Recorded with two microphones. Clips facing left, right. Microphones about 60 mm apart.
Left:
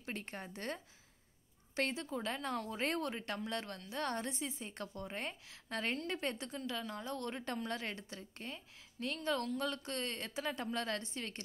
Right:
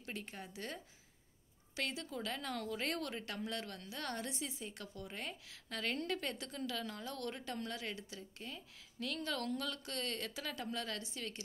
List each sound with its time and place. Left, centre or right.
0.0 s a woman's voice: left
1.8 s a woman's voice: left